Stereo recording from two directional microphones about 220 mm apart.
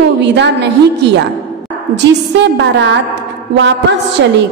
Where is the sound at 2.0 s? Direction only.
50° right (ahead or behind).